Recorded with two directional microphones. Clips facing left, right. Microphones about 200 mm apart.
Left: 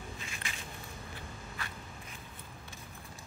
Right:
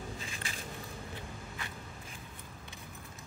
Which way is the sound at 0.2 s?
35° right (ahead or behind).